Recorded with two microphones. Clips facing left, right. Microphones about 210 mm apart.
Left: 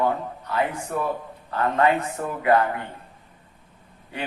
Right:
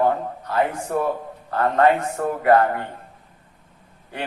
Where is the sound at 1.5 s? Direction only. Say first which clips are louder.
Right 3 dB; 45° right (ahead or behind).